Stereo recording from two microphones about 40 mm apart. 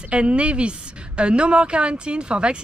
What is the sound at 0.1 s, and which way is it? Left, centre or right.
A woman's voice, right.